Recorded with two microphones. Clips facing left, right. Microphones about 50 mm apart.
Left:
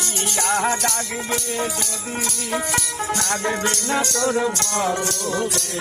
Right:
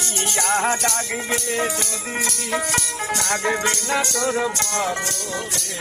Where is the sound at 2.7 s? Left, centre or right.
Centre.